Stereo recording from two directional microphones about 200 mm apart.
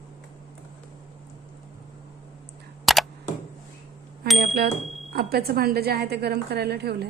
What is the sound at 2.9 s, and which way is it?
Camera, centre (ahead or behind).